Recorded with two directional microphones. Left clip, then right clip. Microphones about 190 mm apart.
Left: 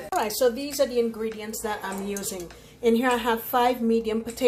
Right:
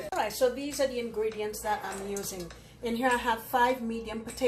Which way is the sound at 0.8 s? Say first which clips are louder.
Left 5 dB; 60° left (ahead or behind).